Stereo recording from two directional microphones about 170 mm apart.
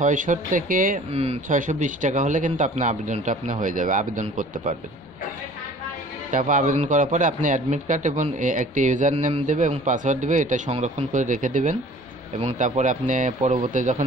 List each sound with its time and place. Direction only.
0.0 s speech: 50° right (ahead or behind)
1.1 s speech: 40° right (ahead or behind)
6.3 s speech: 50° right (ahead or behind)